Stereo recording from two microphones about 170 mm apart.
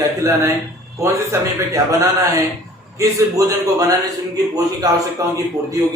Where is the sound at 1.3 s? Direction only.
15° right (ahead or behind).